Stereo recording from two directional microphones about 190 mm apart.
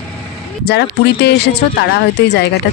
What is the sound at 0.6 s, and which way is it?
Speech, 60° left (ahead or behind).